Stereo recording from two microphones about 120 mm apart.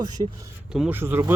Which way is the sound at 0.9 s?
20° right (ahead or behind).